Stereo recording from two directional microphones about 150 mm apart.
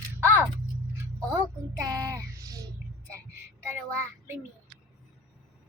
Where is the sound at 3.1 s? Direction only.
20° right (ahead or behind).